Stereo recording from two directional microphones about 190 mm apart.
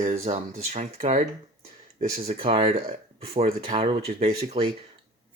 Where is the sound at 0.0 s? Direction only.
35° right (ahead or behind).